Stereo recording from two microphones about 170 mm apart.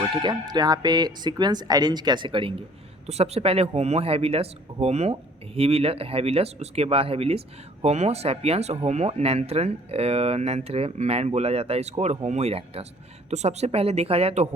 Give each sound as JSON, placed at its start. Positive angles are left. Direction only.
{"t": 0.0, "sound": "speech", "side_deg": -25}